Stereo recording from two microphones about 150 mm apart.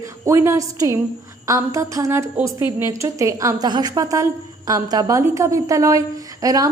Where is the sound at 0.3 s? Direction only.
20° right (ahead or behind).